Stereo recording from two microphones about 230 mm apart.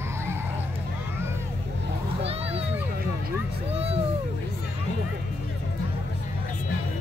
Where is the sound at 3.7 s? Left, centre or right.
Right.